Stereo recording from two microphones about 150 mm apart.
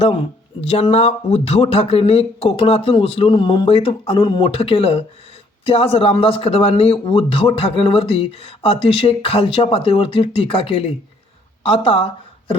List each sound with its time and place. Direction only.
0.0 s a man's voice: 40° left (ahead or behind)